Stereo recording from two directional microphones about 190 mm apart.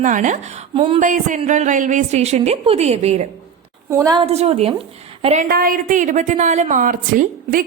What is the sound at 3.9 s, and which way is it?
Speech, 15° right (ahead or behind).